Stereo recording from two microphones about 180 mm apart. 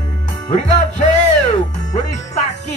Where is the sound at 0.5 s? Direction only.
45° left (ahead or behind).